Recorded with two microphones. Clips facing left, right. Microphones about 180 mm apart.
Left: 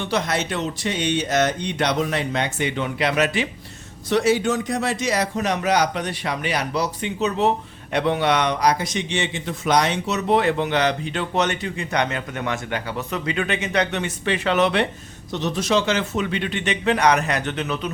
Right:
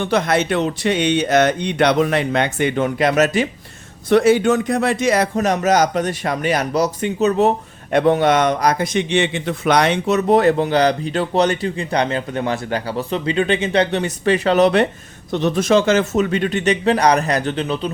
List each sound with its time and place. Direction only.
0.0 s speech: 55° right (ahead or behind)
4.1 s a man's voice: 55° right (ahead or behind); by 14.8 s 40° right (ahead or behind)
15.3 s a man's voice: 55° right (ahead or behind); by 17.9 s 30° right (ahead or behind)